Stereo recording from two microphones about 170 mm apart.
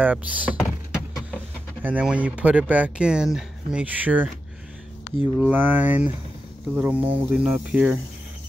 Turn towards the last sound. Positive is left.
turn(degrees=-10)  # may be behind; listen again after turning